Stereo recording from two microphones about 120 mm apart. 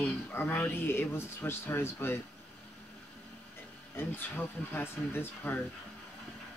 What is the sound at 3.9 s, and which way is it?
Speech, 15° left (ahead or behind).